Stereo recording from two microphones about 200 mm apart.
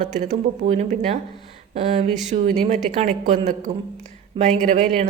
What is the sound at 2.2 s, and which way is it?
A woman's voice, 35° right (ahead or behind).